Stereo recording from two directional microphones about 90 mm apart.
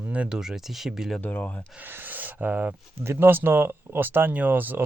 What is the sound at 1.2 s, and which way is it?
Speech, 20° left (ahead or behind).